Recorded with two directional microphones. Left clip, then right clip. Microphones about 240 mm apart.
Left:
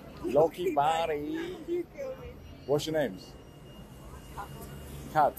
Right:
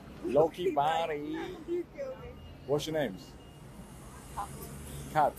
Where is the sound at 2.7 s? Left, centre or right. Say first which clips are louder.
Left 3 dB; centre.